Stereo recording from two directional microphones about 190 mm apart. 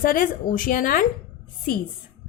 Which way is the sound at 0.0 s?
45° left (ahead or behind).